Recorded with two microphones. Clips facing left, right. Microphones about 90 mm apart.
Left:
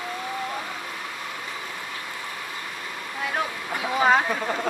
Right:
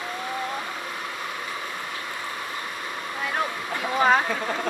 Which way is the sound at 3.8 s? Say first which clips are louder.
Even; 5° left (ahead or behind).